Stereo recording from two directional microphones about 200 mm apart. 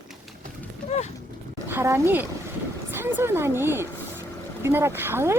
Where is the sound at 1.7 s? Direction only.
10° right (ahead or behind).